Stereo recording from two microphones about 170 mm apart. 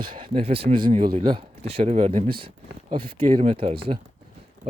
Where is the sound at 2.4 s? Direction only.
30° right (ahead or behind).